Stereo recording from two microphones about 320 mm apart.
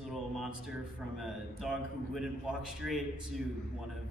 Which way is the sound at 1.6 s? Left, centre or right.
Centre.